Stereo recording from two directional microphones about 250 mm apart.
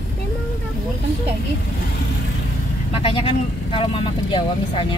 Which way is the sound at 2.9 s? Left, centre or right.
Left.